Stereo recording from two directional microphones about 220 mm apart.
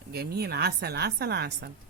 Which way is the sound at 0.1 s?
45° right (ahead or behind).